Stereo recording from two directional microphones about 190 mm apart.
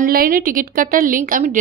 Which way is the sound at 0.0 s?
50° right (ahead or behind).